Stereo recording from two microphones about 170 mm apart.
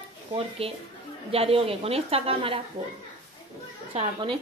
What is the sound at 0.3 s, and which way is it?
A woman's voice, 35° right (ahead or behind).